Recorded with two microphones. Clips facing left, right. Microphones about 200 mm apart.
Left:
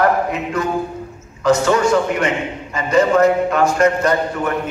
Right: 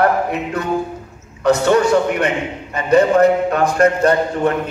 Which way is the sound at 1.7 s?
35° right (ahead or behind).